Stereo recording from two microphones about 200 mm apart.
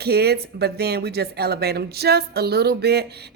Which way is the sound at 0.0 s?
50° right (ahead or behind).